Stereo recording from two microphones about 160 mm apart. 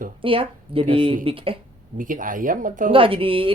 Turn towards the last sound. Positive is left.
turn(degrees=-35)  # may be behind; listen again after turning